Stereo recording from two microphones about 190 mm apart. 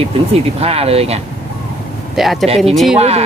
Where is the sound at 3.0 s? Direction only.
35° right (ahead or behind).